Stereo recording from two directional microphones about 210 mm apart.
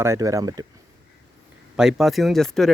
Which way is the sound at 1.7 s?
5° right (ahead or behind).